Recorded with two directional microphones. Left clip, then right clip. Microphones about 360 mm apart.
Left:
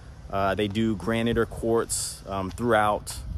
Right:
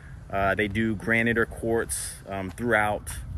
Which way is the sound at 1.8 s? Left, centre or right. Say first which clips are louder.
Left 4 dB; left.